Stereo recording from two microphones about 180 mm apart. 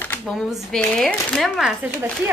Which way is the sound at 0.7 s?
5° left (ahead or behind).